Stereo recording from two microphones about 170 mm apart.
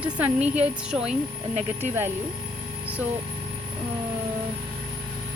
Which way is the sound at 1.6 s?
45° right (ahead or behind).